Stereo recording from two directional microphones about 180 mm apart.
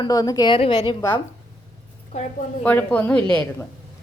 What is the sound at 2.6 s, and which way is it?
A woman's voice, 10° left (ahead or behind).